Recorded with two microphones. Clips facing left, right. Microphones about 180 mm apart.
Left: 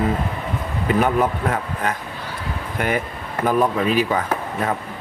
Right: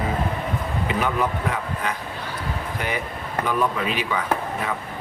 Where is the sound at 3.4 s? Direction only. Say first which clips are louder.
Left 6 dB; 40° left (ahead or behind).